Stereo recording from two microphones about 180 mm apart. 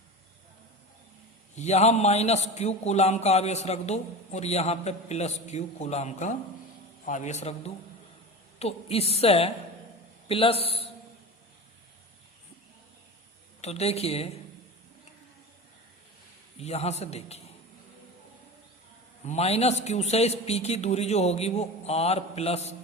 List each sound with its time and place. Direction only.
1.5 s a man's voice: 40° left (ahead or behind)
13.6 s a man's voice: 35° left (ahead or behind)
16.6 s a man's voice: 35° left (ahead or behind)
19.2 s a man's voice: 35° left (ahead or behind)